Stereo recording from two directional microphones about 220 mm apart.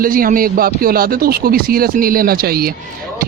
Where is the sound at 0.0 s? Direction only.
40° right (ahead or behind).